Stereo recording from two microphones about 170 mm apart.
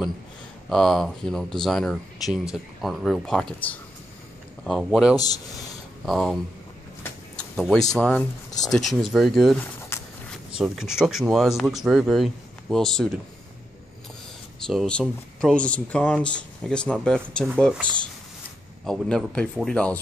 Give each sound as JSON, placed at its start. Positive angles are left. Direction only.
{"t": 0.7, "sound": "speech", "side_deg": 0}
{"t": 5.1, "sound": "a man's voice", "side_deg": 20}
{"t": 6.0, "sound": "speech", "side_deg": 0}
{"t": 7.0, "sound": "a sound", "side_deg": 5}
{"t": 7.9, "sound": "speech", "side_deg": 5}
{"t": 9.9, "sound": "shuffle", "side_deg": 15}
{"t": 10.6, "sound": "speech", "side_deg": -5}
{"t": 14.7, "sound": "speech", "side_deg": 5}
{"t": 18.9, "sound": "speech", "side_deg": 5}